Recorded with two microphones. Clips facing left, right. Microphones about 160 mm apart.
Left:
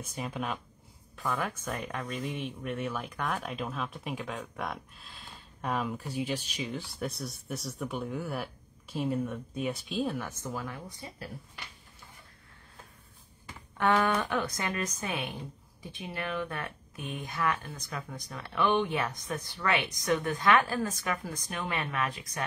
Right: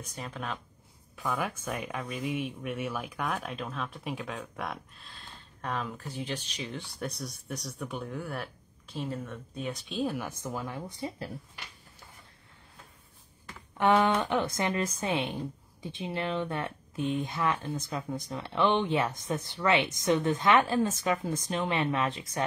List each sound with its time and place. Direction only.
0.0 s speech: 10° left (ahead or behind)
1.1 s speech: 5° right (ahead or behind)
10.1 s speech: 15° right (ahead or behind)
13.7 s speech: 20° right (ahead or behind)